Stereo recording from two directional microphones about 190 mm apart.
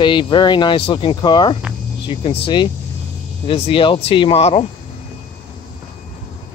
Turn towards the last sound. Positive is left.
turn(degrees=30)  # may be behind; listen again after turning